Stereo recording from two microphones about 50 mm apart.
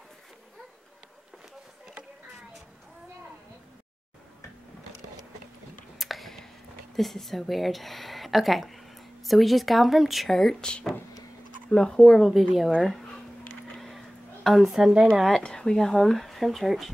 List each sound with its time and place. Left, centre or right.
5.9 s whispering: centre
7.0 s speech: centre
10.3 s speech: centre
13.7 s a sound: centre
14.8 s speech: centre
15.4 s speech: centre